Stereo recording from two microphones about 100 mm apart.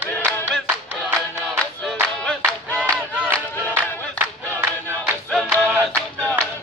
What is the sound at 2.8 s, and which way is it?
Crowd, 15° right (ahead or behind).